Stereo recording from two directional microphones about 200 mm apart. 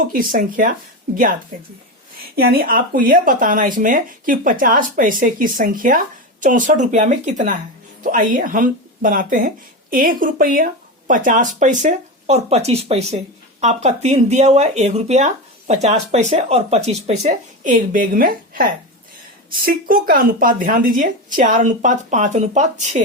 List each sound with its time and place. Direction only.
0.0 s speech: 45° right (ahead or behind)
19.6 s speech: 45° right (ahead or behind)